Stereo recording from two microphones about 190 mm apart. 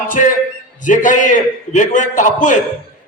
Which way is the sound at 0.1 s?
45° left (ahead or behind).